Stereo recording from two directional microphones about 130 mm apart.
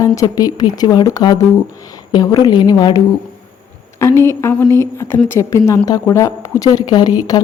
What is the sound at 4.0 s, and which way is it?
A woman's voice, 20° left (ahead or behind).